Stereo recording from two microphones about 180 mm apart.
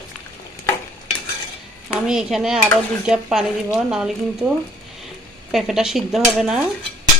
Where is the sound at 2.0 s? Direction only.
5° right (ahead or behind).